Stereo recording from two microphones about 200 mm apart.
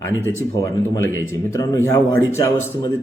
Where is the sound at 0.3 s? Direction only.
15° left (ahead or behind).